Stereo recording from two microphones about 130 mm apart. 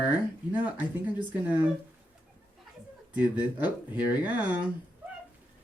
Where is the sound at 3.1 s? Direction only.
15° right (ahead or behind).